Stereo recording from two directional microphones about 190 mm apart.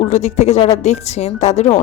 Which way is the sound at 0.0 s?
35° left (ahead or behind).